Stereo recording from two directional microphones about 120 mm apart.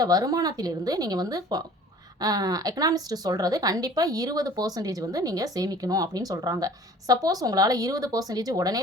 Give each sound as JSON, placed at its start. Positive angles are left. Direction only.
{"t": 0.0, "sound": "a woman's voice", "side_deg": -30}